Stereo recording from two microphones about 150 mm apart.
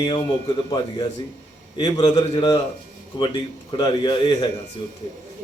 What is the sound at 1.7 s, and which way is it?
Speech, 30° left (ahead or behind).